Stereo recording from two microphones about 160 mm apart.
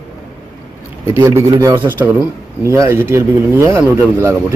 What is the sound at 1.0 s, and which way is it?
Speech, 15° right (ahead or behind).